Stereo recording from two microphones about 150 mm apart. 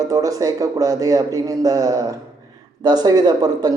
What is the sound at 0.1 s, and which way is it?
Speech, 25° right (ahead or behind).